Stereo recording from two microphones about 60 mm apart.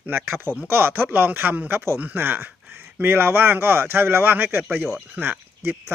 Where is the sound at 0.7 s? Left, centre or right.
Right.